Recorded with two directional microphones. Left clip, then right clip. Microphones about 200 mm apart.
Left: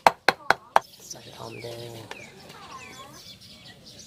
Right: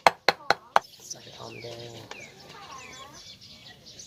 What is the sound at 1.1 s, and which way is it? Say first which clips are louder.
Bird: left 1 dB; 35° left (ahead or behind).